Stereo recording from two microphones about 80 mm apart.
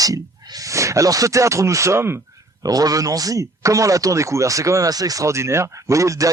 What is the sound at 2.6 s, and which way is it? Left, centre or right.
Speech, right.